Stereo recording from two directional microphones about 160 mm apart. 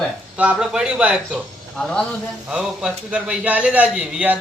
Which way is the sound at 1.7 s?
5° left (ahead or behind).